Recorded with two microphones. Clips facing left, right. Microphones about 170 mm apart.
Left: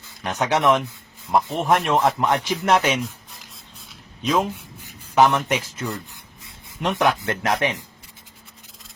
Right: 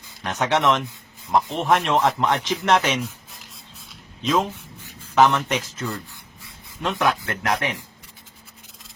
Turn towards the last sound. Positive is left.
turn(degrees=25)  # may be behind; listen again after turning